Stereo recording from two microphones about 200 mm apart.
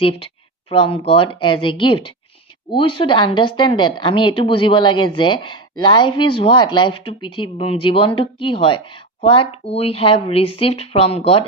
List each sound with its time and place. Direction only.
0.0 s a woman's voice: 30° left (ahead or behind)